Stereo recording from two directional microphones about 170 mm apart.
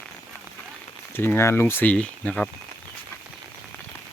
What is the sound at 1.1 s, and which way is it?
Speech, 15° left (ahead or behind).